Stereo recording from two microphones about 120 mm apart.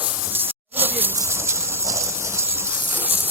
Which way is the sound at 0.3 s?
15° right (ahead or behind).